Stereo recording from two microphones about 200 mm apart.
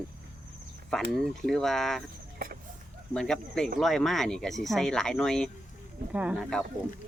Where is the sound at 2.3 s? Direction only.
50° right (ahead or behind).